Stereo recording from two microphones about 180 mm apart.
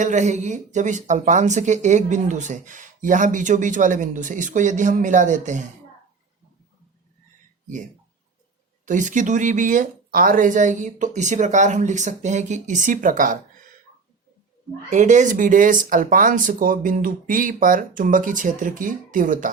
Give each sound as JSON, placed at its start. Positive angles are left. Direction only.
{"t": 0.0, "sound": "speech", "side_deg": -40}
{"t": 8.9, "sound": "speech", "side_deg": -45}
{"t": 14.8, "sound": "speech", "side_deg": -40}